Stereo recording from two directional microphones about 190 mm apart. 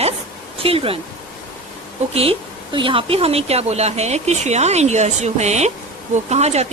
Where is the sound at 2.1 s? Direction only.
30° right (ahead or behind).